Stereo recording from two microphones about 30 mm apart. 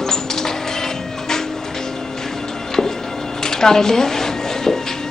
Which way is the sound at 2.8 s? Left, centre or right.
Centre.